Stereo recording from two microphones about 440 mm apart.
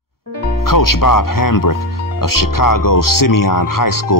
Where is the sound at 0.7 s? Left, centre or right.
Left.